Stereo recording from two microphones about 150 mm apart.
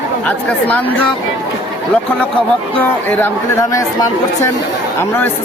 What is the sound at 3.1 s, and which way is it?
Speech, 20° left (ahead or behind).